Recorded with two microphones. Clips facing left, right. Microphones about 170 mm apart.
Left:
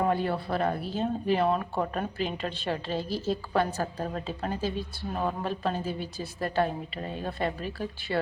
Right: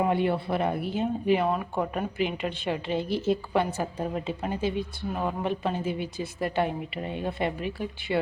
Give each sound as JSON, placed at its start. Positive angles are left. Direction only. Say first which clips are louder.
{"t": 0.1, "sound": "a woman's voice", "louder": "right 2 dB", "side_deg": -20}